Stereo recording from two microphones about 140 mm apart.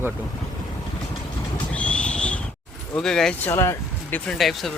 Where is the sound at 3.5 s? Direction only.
20° left (ahead or behind).